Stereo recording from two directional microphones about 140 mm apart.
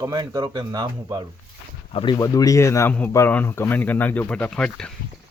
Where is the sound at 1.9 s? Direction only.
40° left (ahead or behind).